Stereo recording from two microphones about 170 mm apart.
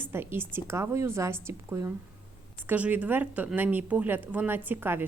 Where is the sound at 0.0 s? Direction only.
15° right (ahead or behind).